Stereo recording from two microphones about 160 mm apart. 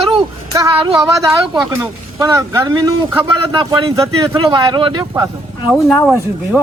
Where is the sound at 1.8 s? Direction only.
20° right (ahead or behind).